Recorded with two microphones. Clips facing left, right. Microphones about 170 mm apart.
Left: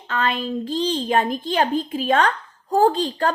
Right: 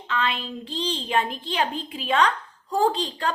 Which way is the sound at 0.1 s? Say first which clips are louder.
Left 4 dB; 45° left (ahead or behind).